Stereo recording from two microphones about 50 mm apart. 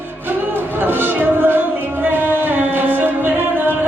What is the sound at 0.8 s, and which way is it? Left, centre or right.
Music, right.